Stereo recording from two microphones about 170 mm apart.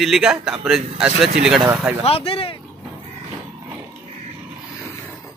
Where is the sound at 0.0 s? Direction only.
Centre (ahead or behind).